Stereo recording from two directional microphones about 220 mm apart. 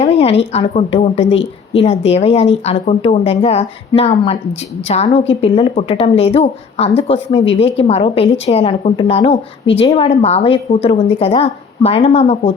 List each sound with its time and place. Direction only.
0.0 s a woman's voice: 30° left (ahead or behind)